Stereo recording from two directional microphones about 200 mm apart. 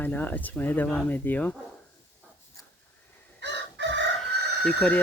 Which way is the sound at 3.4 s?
60° right (ahead or behind).